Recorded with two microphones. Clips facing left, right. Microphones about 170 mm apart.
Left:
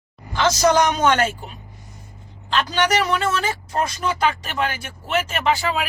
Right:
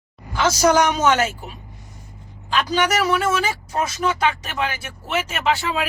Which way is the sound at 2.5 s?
10° right (ahead or behind).